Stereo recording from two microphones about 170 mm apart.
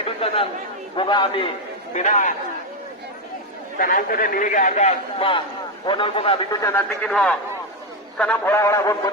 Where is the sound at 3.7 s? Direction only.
55° left (ahead or behind).